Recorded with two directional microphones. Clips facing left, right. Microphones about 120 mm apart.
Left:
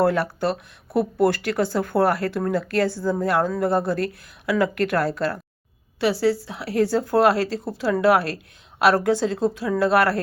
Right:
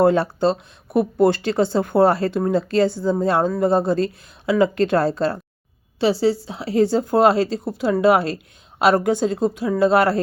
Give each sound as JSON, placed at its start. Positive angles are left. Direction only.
{"t": 0.0, "sound": "speech", "side_deg": -25}